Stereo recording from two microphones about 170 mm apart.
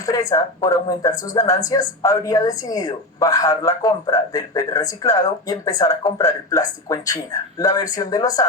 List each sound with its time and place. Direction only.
0.0 s a woman's voice: 20° left (ahead or behind)